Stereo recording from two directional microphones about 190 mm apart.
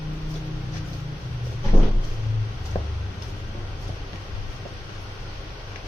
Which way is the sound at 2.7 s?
25° left (ahead or behind).